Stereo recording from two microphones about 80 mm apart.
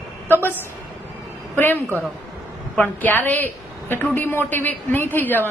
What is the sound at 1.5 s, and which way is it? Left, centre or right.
A woman's voice, left.